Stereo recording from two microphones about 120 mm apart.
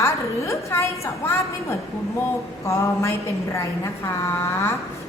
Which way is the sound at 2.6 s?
25° left (ahead or behind).